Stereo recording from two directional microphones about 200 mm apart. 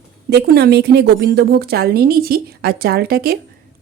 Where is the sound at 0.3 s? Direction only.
55° right (ahead or behind).